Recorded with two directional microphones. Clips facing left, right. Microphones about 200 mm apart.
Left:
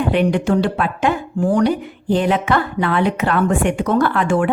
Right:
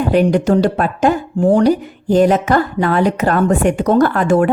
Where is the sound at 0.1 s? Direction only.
40° right (ahead or behind).